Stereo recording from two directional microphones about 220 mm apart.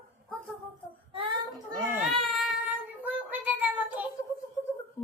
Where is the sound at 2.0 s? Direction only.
Centre (ahead or behind).